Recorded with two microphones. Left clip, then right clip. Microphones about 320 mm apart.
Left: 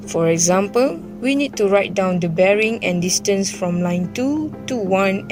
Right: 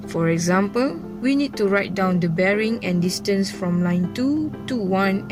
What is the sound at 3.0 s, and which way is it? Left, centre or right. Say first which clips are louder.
Speech: left 3 dB; centre.